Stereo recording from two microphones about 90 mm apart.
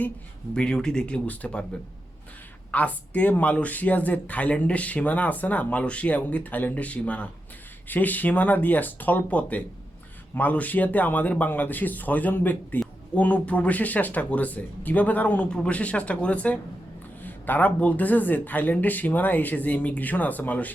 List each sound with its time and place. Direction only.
0.5 s speech: 10° left (ahead or behind)
2.7 s speech: 15° left (ahead or behind)